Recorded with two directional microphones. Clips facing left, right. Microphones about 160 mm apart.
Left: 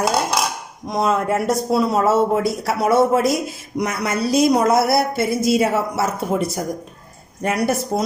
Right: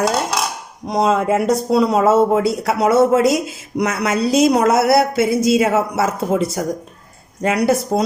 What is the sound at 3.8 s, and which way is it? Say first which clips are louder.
A woman's voice: right 3 dB; 90° right.